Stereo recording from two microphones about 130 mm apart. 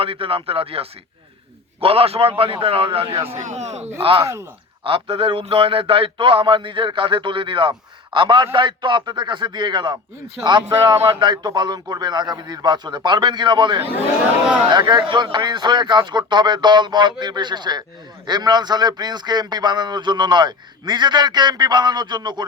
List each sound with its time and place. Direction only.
0.0 s a man's voice: 45° right (ahead or behind)
3.3 s speech: 60° right (ahead or behind)
4.2 s speech: 25° right (ahead or behind)
4.8 s a man's voice: 45° right (ahead or behind)
11.2 s a man's voice: 35° right (ahead or behind)